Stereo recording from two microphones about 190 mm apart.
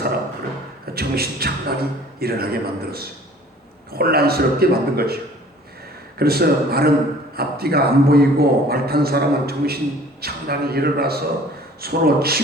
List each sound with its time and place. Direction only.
0.9 s a man's voice: 55° right (ahead or behind)